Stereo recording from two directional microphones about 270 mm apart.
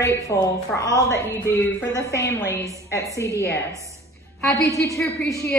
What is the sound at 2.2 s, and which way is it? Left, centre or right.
Speech, centre.